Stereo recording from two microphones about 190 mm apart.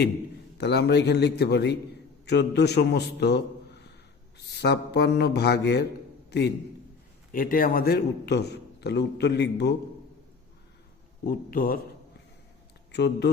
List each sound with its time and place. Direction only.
0.6 s a man's voice: 60° left (ahead or behind)
7.3 s a man's voice: 50° left (ahead or behind)
11.3 s a man's voice: 50° left (ahead or behind)
12.9 s speech: 60° left (ahead or behind)